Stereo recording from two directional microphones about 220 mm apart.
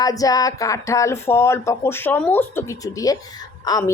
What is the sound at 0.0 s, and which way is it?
Speech, 15° left (ahead or behind).